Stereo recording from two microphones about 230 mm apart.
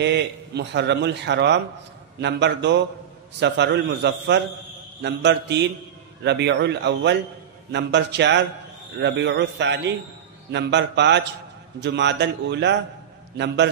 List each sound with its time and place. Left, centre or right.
0.0 s a man's voice: right